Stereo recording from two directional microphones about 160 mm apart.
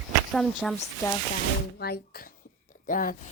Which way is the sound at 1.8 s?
75° left (ahead or behind).